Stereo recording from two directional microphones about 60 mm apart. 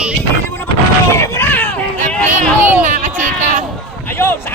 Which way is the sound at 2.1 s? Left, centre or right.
Centre.